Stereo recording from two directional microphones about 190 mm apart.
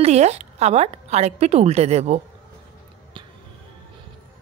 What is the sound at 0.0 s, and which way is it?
A woman's voice, 35° right (ahead or behind).